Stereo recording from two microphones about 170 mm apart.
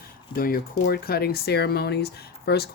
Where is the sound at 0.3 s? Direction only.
60° left (ahead or behind).